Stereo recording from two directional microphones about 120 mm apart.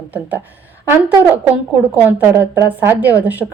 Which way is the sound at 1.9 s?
15° right (ahead or behind).